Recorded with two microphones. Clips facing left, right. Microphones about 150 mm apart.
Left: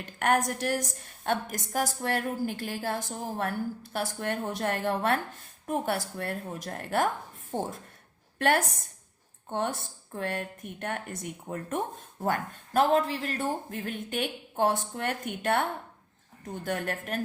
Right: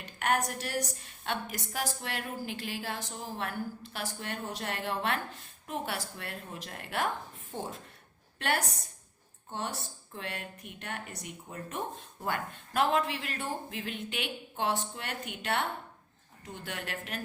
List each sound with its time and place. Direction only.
0.0 s a woman's voice: 50° left (ahead or behind)